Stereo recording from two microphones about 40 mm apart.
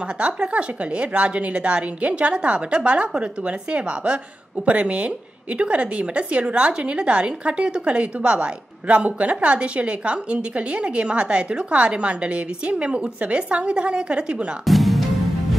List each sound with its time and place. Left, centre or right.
0.2 s a woman's voice: right
14.7 s music: centre